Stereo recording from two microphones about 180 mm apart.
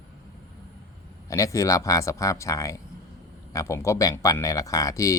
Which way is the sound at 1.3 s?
15° left (ahead or behind).